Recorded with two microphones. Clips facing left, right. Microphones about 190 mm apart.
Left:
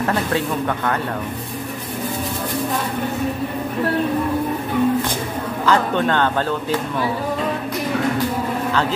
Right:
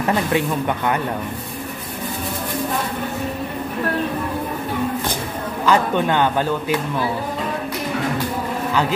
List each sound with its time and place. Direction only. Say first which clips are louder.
0.0 s a man's voice: right 1 dB; 15° right (ahead or behind)
5.7 s a man's voice: right 1 dB; 15° right (ahead or behind)